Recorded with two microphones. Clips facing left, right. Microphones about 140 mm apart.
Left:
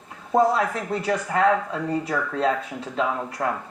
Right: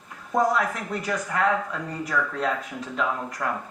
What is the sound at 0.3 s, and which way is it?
Speech, 30° left (ahead or behind).